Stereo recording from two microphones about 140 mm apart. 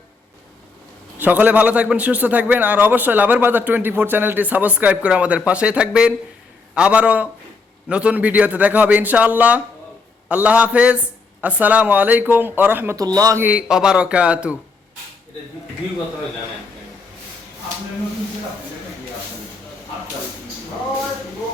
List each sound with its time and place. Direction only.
1.2 s a man's voice: 10° right (ahead or behind)
13.0 s a man's voice: 25° right (ahead or behind)
13.4 s a man's voice: 10° right (ahead or behind)